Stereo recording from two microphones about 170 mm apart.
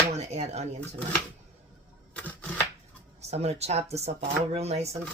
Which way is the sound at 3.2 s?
40° right (ahead or behind).